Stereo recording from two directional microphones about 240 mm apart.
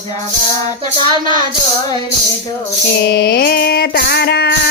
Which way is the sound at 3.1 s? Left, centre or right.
Left.